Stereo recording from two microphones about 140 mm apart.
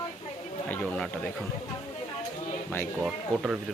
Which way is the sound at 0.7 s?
10° left (ahead or behind).